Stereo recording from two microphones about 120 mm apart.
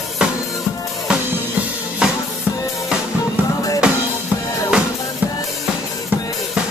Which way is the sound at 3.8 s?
10° right (ahead or behind).